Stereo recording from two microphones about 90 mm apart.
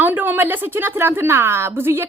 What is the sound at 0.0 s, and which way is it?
Speech, 20° right (ahead or behind).